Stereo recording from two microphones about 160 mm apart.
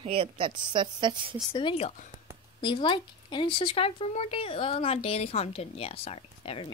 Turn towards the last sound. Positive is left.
turn(degrees=35)  # may be behind; listen again after turning